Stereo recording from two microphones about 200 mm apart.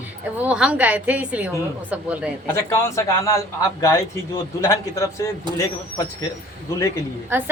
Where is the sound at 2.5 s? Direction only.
15° left (ahead or behind).